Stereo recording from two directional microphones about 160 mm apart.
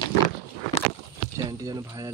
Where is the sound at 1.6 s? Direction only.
20° right (ahead or behind).